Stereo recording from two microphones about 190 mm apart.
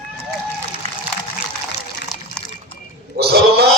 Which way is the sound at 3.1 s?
60° right (ahead or behind).